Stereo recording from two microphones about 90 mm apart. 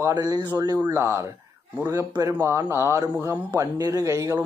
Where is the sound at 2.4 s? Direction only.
30° right (ahead or behind).